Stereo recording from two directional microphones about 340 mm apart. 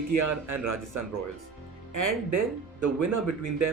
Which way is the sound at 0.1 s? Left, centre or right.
Right.